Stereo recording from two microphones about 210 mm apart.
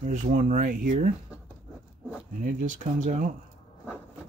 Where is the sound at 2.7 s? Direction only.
35° right (ahead or behind).